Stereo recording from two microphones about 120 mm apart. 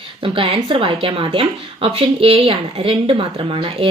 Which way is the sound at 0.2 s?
45° right (ahead or behind).